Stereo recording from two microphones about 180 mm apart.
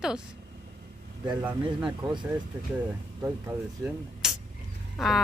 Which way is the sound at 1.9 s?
25° right (ahead or behind).